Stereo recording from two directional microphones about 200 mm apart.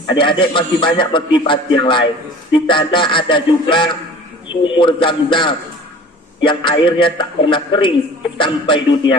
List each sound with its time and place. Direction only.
0.1 s a man's voice: 25° left (ahead or behind)